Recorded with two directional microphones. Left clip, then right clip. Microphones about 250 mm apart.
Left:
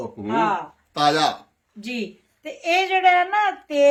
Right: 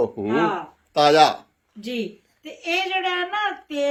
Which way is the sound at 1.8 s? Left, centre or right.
Centre.